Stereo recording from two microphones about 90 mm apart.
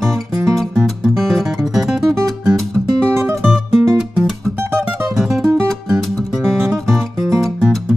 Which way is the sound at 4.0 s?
5° right (ahead or behind).